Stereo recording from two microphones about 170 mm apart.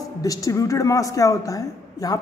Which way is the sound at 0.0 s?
20° left (ahead or behind).